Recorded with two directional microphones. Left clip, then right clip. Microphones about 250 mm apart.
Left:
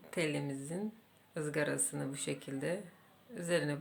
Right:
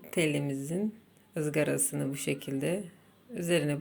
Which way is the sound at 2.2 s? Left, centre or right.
Left.